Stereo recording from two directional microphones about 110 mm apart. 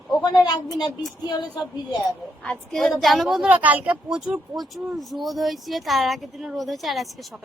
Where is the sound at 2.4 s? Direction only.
5° left (ahead or behind).